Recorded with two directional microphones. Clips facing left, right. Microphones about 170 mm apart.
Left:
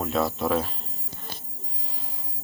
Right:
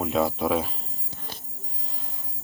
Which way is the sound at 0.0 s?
10° right (ahead or behind).